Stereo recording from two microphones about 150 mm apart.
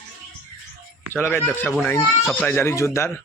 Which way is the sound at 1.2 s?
10° left (ahead or behind).